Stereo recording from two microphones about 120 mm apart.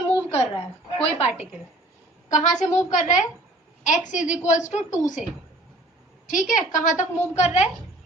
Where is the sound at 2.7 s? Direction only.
90° left.